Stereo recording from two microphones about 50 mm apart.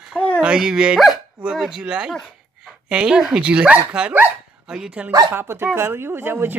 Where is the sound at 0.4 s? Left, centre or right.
Centre.